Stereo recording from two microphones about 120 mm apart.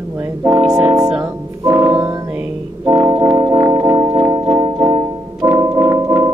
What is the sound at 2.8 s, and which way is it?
Organ, 25° right (ahead or behind).